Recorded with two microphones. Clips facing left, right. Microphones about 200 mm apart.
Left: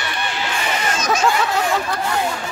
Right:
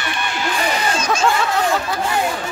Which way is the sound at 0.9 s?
30° right (ahead or behind).